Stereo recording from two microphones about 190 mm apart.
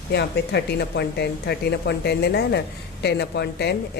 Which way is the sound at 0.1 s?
60° left (ahead or behind).